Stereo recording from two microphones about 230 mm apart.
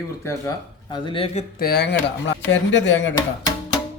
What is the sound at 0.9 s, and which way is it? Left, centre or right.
Speech, left.